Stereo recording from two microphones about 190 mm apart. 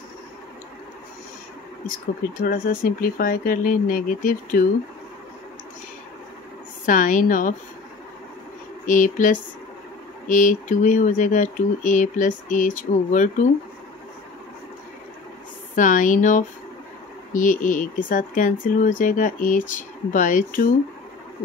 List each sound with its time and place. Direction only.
2.4 s speech: 50° left (ahead or behind)
6.9 s speech: 45° left (ahead or behind)
8.8 s speech: 45° left (ahead or behind)
15.7 s speech: 45° left (ahead or behind)